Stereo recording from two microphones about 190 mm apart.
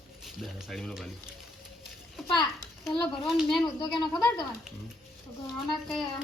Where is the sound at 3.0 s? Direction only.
Centre (ahead or behind).